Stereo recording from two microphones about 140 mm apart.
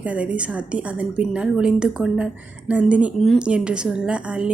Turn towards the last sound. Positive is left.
turn(degrees=-10)  # may be behind; listen again after turning